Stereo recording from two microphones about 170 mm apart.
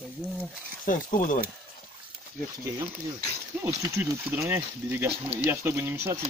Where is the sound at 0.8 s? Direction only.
50° left (ahead or behind).